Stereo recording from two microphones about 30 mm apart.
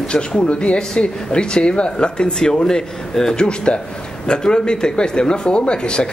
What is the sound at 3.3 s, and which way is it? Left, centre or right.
Speech, left.